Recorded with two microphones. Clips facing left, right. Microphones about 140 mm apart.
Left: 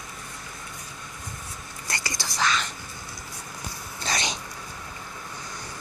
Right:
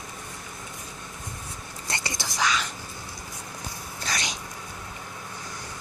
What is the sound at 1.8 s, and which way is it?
Whispering, 25° right (ahead or behind).